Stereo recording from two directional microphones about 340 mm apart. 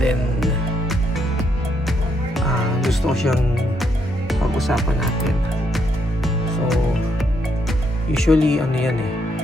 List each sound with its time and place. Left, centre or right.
0.0 s music: centre
2.3 s music: centre
4.3 s speech: centre
8.1 s speech: centre